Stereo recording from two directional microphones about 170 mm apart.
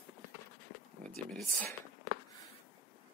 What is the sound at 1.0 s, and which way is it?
Speech, 5° left (ahead or behind).